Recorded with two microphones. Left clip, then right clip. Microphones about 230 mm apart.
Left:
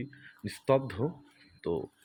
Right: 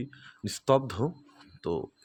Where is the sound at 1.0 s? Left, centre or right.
Centre.